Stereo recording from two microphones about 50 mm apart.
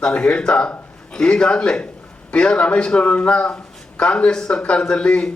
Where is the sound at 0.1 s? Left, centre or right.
Left.